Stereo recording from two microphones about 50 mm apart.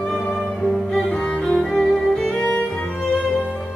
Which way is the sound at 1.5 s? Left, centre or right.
Centre.